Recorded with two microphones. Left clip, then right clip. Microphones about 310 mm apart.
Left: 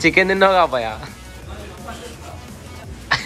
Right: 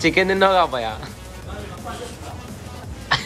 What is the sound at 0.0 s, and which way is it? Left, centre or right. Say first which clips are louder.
Speech: left 3 dB; centre.